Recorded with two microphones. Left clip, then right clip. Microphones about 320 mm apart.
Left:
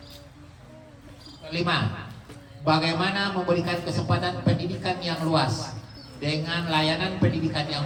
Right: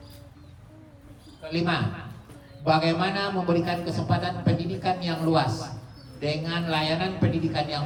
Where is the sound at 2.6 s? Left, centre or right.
Centre.